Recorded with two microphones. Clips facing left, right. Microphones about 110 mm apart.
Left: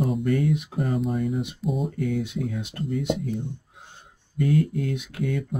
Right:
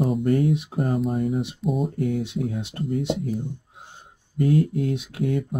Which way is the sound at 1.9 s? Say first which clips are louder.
Right 2 dB; 45° right (ahead or behind).